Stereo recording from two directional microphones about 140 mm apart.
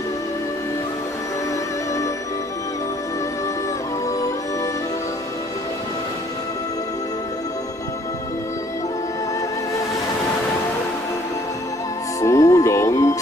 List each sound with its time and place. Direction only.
12.2 s music: 20° left (ahead or behind)